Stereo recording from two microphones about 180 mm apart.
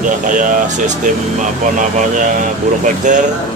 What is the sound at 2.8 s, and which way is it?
Speech, 45° right (ahead or behind).